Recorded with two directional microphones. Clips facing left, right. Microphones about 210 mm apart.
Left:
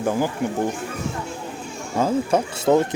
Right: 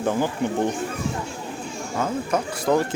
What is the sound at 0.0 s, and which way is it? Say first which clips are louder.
Speech: left 1 dB; 10° left (ahead or behind).